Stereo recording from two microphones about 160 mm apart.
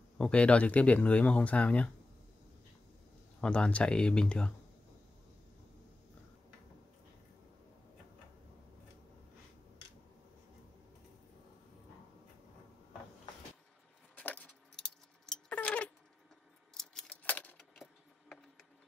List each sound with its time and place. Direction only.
0.2 s speech: 5° left (ahead or behind)
3.3 s speech: 5° left (ahead or behind)
14.1 s keys jangling: 10° left (ahead or behind)